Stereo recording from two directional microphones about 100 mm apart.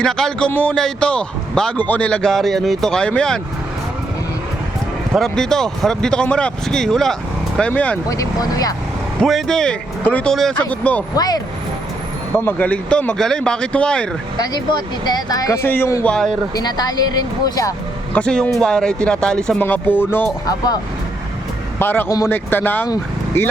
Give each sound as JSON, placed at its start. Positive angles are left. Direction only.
{"t": 0.0, "sound": "a man's voice", "side_deg": 5}
{"t": 5.1, "sound": "a man's voice", "side_deg": 5}
{"t": 8.1, "sound": "speech", "side_deg": 35}
{"t": 9.2, "sound": "a man's voice", "side_deg": 5}
{"t": 11.1, "sound": "speech", "side_deg": 40}
{"t": 12.5, "sound": "a man's voice", "side_deg": 15}
{"t": 14.3, "sound": "speech", "side_deg": 45}
{"t": 15.4, "sound": "music", "side_deg": 25}
{"t": 16.0, "sound": "a man's voice", "side_deg": 5}
{"t": 16.6, "sound": "speech", "side_deg": 40}
{"t": 18.1, "sound": "a man's voice", "side_deg": 10}
{"t": 19.6, "sound": "music", "side_deg": 20}
{"t": 21.8, "sound": "speech", "side_deg": 20}
{"t": 22.3, "sound": "music", "side_deg": 20}